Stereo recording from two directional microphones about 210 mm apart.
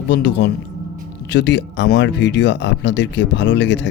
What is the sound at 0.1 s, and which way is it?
Speech, 55° left (ahead or behind).